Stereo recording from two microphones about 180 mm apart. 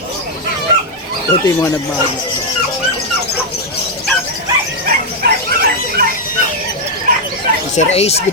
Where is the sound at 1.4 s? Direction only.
15° left (ahead or behind).